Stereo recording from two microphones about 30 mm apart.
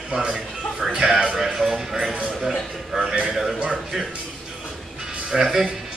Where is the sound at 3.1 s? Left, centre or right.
Right.